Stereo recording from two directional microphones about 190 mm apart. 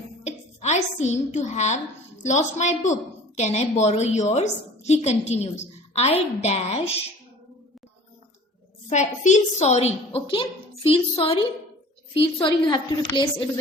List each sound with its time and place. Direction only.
0.3 s a woman's voice: 35° left (ahead or behind)
8.9 s a woman's voice: 40° left (ahead or behind)
12.4 s a woman's voice: 25° left (ahead or behind)